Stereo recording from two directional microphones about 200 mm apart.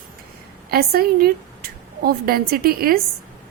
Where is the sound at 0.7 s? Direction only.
50° right (ahead or behind).